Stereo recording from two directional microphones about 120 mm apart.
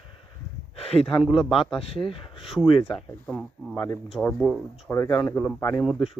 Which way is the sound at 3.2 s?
5° left (ahead or behind).